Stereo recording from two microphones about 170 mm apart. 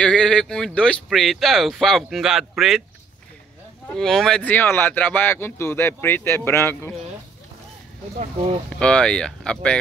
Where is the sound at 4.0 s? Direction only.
Centre (ahead or behind).